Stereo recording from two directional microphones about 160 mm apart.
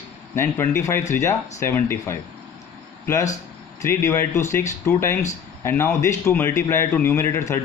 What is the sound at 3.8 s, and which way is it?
A man's voice, 20° left (ahead or behind).